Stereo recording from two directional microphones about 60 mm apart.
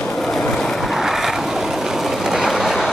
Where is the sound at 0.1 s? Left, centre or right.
Centre.